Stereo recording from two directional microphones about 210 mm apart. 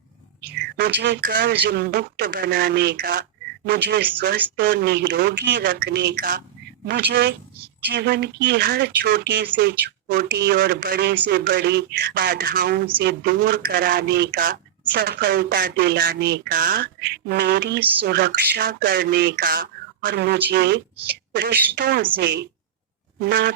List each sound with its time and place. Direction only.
0.5 s speech: 50° right (ahead or behind)
20.9 s a woman's voice: 10° right (ahead or behind)
21.3 s speech: 50° right (ahead or behind)
23.1 s fart: 50° right (ahead or behind)